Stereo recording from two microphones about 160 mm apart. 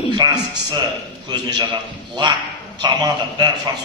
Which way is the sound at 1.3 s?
25° right (ahead or behind).